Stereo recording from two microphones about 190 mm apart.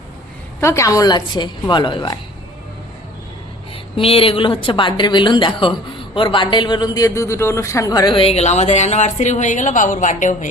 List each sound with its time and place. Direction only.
0.6 s speech: 15° left (ahead or behind)
3.9 s speech: 30° left (ahead or behind)